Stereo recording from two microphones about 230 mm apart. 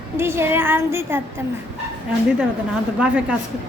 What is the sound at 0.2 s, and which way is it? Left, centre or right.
Speech, centre.